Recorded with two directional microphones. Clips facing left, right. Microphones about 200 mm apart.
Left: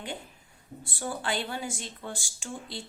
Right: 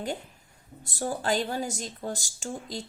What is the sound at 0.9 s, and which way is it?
Speech, 40° right (ahead or behind).